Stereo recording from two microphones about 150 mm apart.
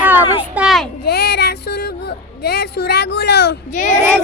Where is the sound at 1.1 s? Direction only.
90° left.